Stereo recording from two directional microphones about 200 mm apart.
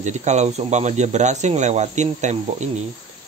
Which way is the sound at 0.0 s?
35° right (ahead or behind).